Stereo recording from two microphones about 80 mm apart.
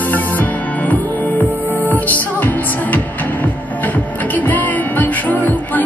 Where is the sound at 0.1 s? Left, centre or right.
Left.